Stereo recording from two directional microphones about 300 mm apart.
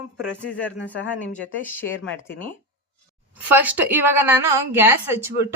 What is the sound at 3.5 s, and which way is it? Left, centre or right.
Speech, centre.